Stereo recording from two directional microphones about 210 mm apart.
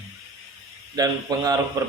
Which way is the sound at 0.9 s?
20° right (ahead or behind).